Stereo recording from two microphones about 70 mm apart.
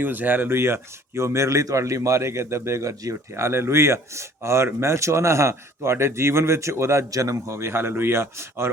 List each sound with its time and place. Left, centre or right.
0.0 s speech: right